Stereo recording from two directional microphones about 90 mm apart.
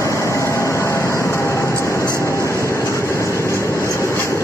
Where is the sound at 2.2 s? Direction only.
35° left (ahead or behind).